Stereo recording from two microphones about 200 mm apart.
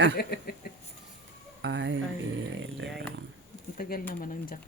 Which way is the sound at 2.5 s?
70° right (ahead or behind).